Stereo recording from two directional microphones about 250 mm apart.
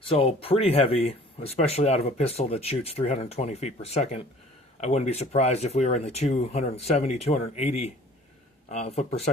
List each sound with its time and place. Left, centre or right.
0.0 s speech: left